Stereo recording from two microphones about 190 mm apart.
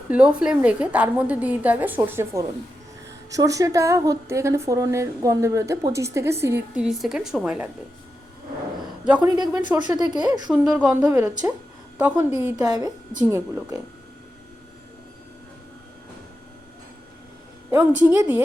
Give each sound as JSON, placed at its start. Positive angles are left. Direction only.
{"t": 0.1, "sound": "a woman's voice", "side_deg": -5}
{"t": 9.0, "sound": "a woman's voice", "side_deg": -5}
{"t": 9.7, "sound": "speech", "side_deg": -20}
{"t": 10.5, "sound": "a woman's voice", "side_deg": -5}
{"t": 13.2, "sound": "a woman's voice", "side_deg": -10}
{"t": 17.7, "sound": "a woman's voice", "side_deg": -10}